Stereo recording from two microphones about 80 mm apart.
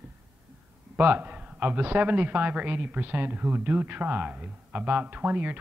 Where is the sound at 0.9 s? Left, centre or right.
Right.